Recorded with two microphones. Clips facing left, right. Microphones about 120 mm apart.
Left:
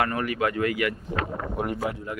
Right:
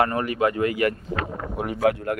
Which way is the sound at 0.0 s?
30° right (ahead or behind).